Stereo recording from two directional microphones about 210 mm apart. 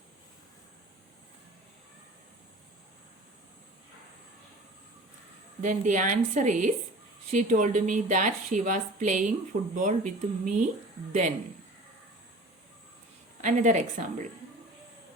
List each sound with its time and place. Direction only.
5.6 s speech: 35° right (ahead or behind)
13.4 s speech: 35° right (ahead or behind)